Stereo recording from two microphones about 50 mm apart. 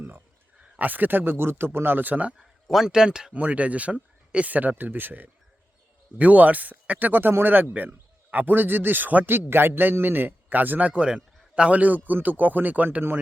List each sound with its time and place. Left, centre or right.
0.8 s speech: right
2.4 s a sound: centre
2.8 s speech: centre
3.3 s speech: right
9.3 s speech: right